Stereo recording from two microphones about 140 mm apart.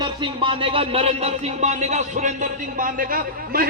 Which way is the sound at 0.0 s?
35° right (ahead or behind).